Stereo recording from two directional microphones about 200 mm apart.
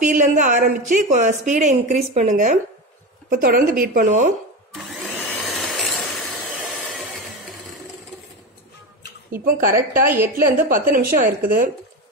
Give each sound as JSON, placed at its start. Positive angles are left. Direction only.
{"t": 0.0, "sound": "a woman's voice", "side_deg": -40}
{"t": 4.7, "sound": "vacuum cleaner", "side_deg": 0}
{"t": 6.7, "sound": "a sound", "side_deg": 0}
{"t": 9.3, "sound": "speech", "side_deg": -45}
{"t": 9.8, "sound": "a woman's voice", "side_deg": -10}
{"t": 10.7, "sound": "speech", "side_deg": -45}